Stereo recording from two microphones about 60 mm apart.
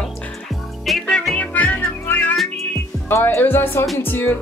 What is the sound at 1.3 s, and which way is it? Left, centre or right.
Music, left.